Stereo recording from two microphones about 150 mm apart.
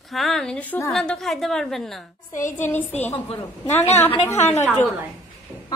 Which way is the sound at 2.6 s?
15° left (ahead or behind).